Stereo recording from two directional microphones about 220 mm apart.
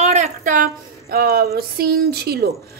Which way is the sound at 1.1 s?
45° right (ahead or behind).